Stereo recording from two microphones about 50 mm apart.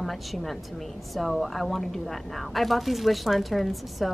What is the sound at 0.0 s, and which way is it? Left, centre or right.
A woman's voice, centre.